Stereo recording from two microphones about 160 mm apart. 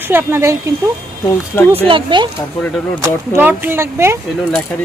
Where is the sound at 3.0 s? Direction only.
15° right (ahead or behind).